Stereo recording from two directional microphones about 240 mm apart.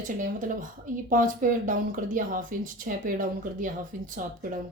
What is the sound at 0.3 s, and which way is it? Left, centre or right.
A woman's voice, right.